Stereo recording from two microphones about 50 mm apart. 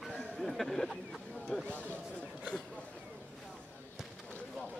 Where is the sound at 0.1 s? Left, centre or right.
Centre.